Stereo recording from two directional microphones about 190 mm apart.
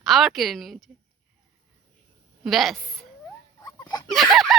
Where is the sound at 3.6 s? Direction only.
20° left (ahead or behind).